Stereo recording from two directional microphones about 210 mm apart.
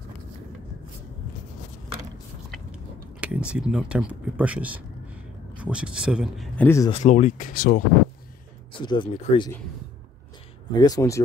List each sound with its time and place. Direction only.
3.2 s speech: 5° right (ahead or behind); by 6.9 s 10° left (ahead or behind)
6.9 s speech: 35° left (ahead or behind)
8.7 s speech: 25° left (ahead or behind)
10.7 s speech: 20° left (ahead or behind)